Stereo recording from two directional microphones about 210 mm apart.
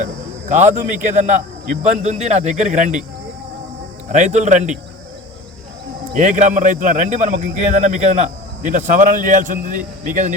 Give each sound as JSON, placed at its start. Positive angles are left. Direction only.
{"t": 0.0, "sound": "a man's voice", "side_deg": -35}
{"t": 4.1, "sound": "a man's voice", "side_deg": -35}
{"t": 6.1, "sound": "a man's voice", "side_deg": -35}